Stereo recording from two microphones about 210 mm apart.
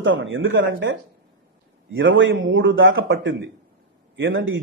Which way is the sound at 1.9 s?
65° right (ahead or behind).